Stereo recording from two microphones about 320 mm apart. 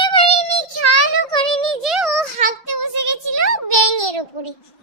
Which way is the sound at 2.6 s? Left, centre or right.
Right.